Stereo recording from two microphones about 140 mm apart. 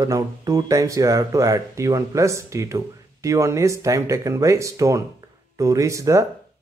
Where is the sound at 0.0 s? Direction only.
25° right (ahead or behind).